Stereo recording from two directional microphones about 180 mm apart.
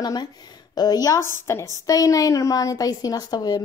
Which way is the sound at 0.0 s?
20° left (ahead or behind).